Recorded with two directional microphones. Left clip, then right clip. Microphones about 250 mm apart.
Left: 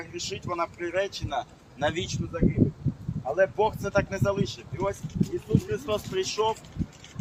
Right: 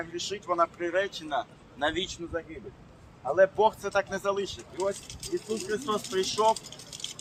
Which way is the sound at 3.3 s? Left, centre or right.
Centre.